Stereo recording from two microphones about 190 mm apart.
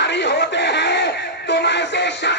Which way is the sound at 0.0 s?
65° left (ahead or behind).